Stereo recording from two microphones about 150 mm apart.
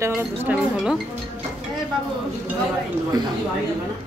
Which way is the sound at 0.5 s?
5° right (ahead or behind).